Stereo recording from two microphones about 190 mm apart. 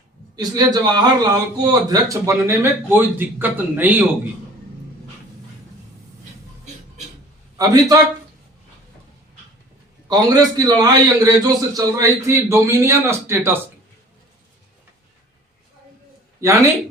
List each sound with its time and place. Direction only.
0.3 s a man's voice: 20° right (ahead or behind)
7.6 s a man's voice: 20° right (ahead or behind)
10.1 s a man's voice: 20° right (ahead or behind)
16.4 s a man's voice: 15° right (ahead or behind)